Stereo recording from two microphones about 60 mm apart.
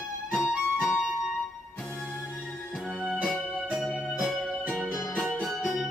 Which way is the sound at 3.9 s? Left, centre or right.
Right.